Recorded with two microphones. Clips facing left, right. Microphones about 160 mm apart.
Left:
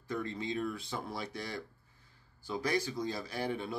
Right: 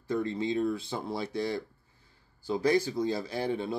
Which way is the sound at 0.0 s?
30° right (ahead or behind).